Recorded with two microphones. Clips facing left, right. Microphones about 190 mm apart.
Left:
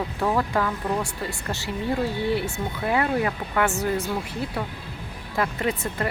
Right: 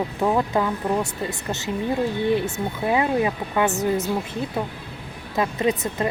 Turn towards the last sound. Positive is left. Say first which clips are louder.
# right 4 dB
turn(degrees=-20)  # may be behind; listen again after turning